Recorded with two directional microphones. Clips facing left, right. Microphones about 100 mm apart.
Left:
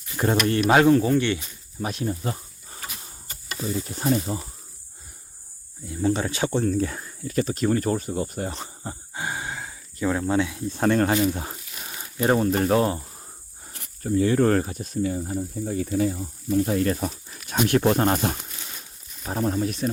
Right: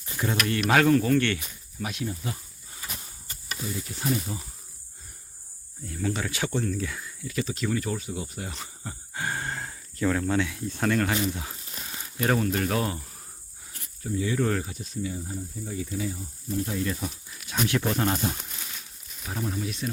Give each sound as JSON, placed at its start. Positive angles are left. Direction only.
{"t": 0.2, "sound": "speech", "side_deg": 40}
{"t": 1.8, "sound": "snake", "side_deg": 40}
{"t": 3.6, "sound": "speech", "side_deg": 35}
{"t": 6.0, "sound": "speech", "side_deg": 30}
{"t": 6.7, "sound": "speech", "side_deg": 40}
{"t": 9.1, "sound": "sigh", "side_deg": 15}
{"t": 10.1, "sound": "speech", "side_deg": 20}
{"t": 13.7, "sound": "speech", "side_deg": 60}
{"t": 19.2, "sound": "speech", "side_deg": 45}